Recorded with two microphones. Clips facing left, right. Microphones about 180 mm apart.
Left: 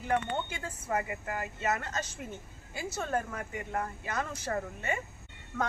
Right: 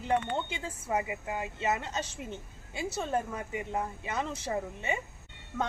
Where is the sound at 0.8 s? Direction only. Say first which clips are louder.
Right 1 dB; 15° right (ahead or behind).